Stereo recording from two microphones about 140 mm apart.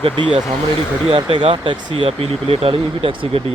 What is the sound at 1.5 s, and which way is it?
Speech, 35° right (ahead or behind).